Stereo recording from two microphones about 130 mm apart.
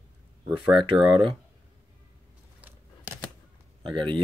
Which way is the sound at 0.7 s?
40° right (ahead or behind).